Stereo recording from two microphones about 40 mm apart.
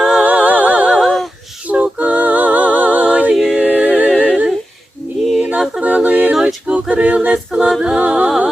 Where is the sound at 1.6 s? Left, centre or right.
Right.